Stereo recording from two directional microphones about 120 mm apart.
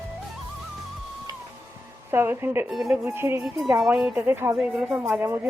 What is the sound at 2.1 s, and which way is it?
A woman's voice, 20° right (ahead or behind).